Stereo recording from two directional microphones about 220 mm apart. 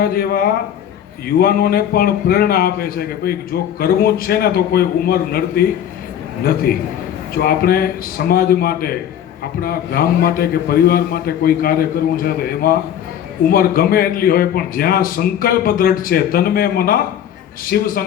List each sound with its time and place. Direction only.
0.0 s a man's voice: 45° left (ahead or behind)
6.7 s a man's voice: 45° left (ahead or behind)